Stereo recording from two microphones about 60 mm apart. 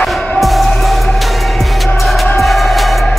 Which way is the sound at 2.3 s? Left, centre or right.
Centre.